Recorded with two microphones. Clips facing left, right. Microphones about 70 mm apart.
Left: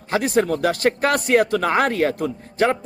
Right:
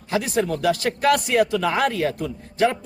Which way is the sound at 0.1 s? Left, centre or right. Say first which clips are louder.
Left 3 dB; left.